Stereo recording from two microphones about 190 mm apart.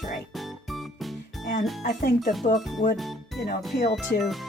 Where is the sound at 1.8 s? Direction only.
40° left (ahead or behind).